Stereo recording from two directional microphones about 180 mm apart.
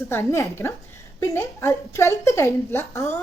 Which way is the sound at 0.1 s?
15° left (ahead or behind).